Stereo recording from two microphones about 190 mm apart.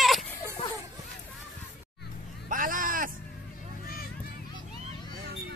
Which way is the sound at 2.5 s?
45° right (ahead or behind).